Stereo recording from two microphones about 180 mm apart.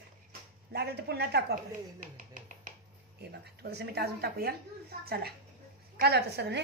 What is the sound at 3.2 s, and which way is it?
Speech, 65° right (ahead or behind).